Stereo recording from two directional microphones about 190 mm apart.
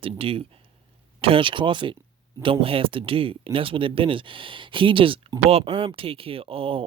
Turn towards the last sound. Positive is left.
turn(degrees=-30)  # may be behind; listen again after turning